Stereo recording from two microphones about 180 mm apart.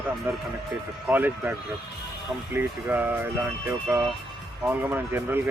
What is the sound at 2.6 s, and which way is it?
Speech, 10° right (ahead or behind).